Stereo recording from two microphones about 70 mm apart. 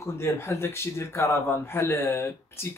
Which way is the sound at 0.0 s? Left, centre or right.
Left.